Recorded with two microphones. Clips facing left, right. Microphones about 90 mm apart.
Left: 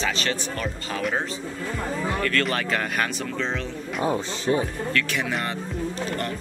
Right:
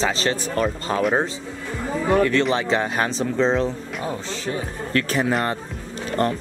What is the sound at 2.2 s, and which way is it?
Speech, 20° right (ahead or behind).